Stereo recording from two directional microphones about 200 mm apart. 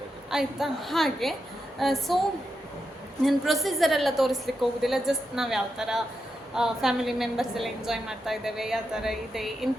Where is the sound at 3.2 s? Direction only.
Centre (ahead or behind).